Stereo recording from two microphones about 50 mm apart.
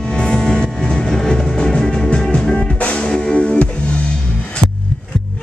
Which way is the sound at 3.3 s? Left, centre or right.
Left.